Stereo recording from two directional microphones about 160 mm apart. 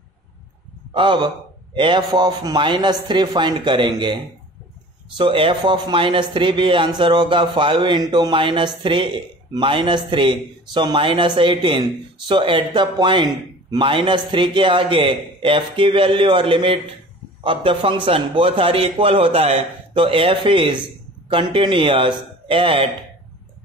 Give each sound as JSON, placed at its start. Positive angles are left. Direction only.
{"t": 0.9, "sound": "speech", "side_deg": -30}
{"t": 5.1, "sound": "speech", "side_deg": -30}